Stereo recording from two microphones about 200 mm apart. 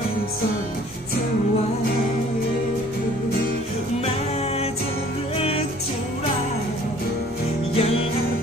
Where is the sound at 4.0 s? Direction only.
30° left (ahead or behind).